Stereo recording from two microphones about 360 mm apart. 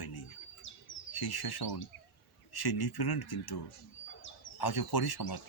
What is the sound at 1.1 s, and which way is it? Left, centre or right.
Speech, left.